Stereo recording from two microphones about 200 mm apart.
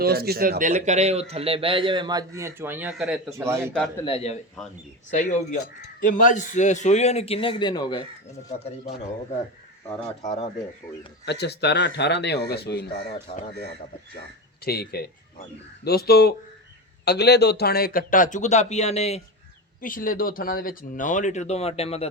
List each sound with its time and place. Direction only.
0.0 s a man's voice: 50° right (ahead or behind); by 3.2 s 5° right (ahead or behind)
3.2 s a man's voice: 15° right (ahead or behind)
4.0 s speech: 30° left (ahead or behind)
4.6 s speech: centre (ahead or behind)
5.1 s speech: 35° left (ahead or behind)
10.2 s speech: 30° left (ahead or behind)
11.3 s speech: 55° left (ahead or behind)
13.3 s speech: 30° left (ahead or behind)
14.6 s speech: 50° left (ahead or behind); by 19.2 s 30° left (ahead or behind)
19.8 s speech: 45° left (ahead or behind)